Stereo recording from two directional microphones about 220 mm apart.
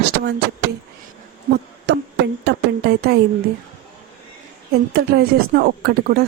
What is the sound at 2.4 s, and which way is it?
Speech, 45° right (ahead or behind).